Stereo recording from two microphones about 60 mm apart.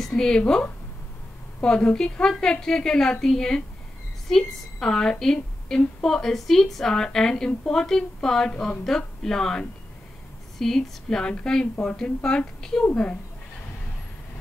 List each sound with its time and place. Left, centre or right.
0.0 s a woman's voice: centre